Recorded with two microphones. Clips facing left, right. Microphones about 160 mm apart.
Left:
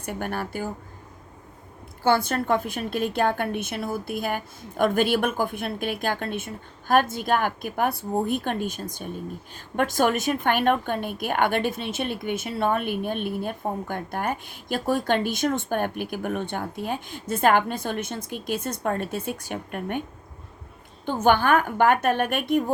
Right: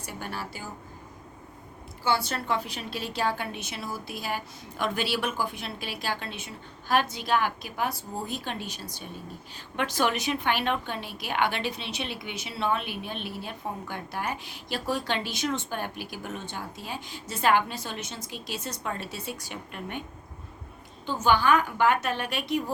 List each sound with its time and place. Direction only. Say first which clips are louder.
0.0 s a woman's voice: left 7 dB; 55° left (ahead or behind)
2.0 s a woman's voice: left 6 dB; 50° left (ahead or behind)